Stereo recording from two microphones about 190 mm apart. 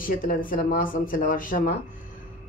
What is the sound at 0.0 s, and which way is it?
Speech, 50° left (ahead or behind).